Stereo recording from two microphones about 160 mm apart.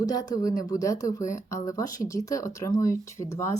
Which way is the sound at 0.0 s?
25° left (ahead or behind).